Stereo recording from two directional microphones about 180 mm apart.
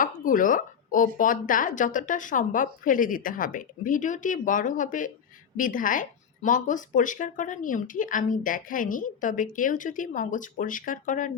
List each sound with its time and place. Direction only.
0.0 s speech: 50° left (ahead or behind)